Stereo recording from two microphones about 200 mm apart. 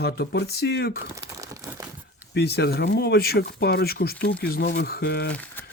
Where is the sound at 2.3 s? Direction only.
55° left (ahead or behind).